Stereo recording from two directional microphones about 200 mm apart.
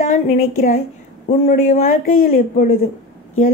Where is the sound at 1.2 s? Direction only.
35° left (ahead or behind).